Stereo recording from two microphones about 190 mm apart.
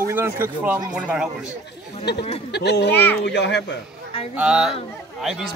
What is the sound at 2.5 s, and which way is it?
Speech, 60° left (ahead or behind).